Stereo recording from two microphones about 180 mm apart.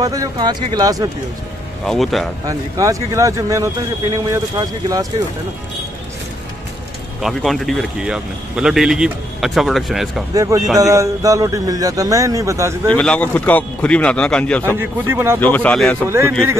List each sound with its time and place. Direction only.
0.0 s a man's voice: 20° right (ahead or behind)
1.9 s speech: centre (ahead or behind)
2.4 s speech: 20° right (ahead or behind)
7.2 s speech: centre (ahead or behind)
10.3 s a man's voice: 20° right (ahead or behind)
12.8 s speech: 5° left (ahead or behind)
14.8 s speech: 15° right (ahead or behind)
15.4 s speech: 10° left (ahead or behind)
16.1 s speech: 15° right (ahead or behind)